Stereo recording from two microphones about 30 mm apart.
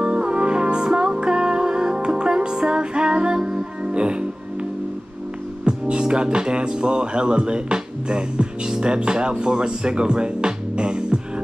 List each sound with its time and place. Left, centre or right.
0.0 s music: right
5.7 s speech: right